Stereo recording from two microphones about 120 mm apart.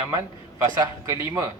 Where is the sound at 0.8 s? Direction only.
25° right (ahead or behind).